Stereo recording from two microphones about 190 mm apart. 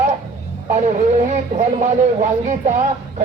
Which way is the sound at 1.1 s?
40° right (ahead or behind).